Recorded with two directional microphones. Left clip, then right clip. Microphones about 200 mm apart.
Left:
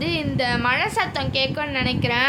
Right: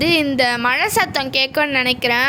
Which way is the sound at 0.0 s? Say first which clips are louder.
Right 8 dB; 40° right (ahead or behind).